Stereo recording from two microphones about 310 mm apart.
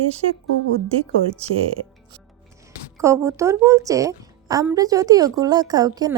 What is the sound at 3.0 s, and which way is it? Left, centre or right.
A woman's voice, centre.